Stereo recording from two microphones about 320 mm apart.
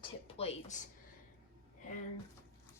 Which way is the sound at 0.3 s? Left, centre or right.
Centre.